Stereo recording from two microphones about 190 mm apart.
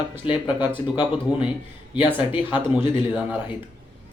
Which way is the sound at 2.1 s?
10° right (ahead or behind).